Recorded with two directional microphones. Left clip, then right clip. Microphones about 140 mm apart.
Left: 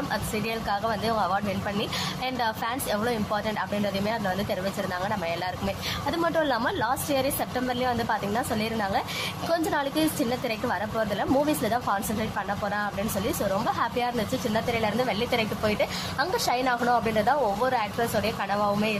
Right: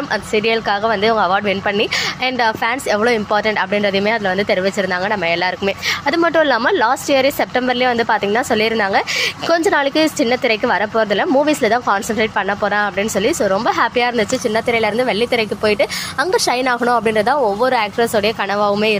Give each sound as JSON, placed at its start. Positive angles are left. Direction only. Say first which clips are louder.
{"t": 0.1, "sound": "a woman's voice", "louder": "right 17 dB", "side_deg": -30}